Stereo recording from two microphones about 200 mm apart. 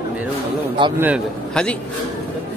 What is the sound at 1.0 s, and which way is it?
Speech, 10° right (ahead or behind).